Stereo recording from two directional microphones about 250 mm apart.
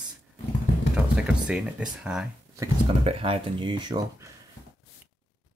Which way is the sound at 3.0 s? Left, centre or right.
Right.